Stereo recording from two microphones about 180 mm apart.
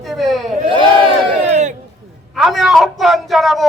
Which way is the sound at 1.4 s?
40° right (ahead or behind).